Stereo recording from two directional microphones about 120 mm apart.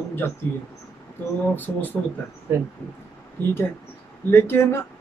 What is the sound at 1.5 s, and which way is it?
Speech, 15° left (ahead or behind).